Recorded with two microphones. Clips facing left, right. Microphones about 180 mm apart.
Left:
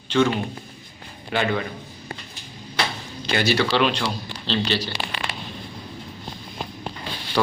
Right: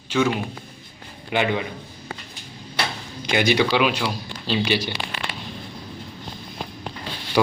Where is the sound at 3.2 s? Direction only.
15° right (ahead or behind).